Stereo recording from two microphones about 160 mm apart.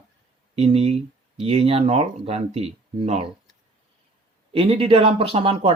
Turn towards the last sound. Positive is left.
turn(degrees=-35)  # may be behind; listen again after turning